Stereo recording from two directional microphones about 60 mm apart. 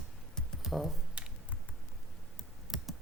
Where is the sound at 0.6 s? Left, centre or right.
Centre.